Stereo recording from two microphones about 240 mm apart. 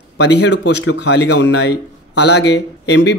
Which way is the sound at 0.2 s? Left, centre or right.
Left.